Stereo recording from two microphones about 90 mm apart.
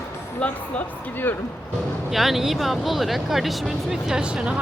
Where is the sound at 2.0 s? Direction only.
Centre (ahead or behind).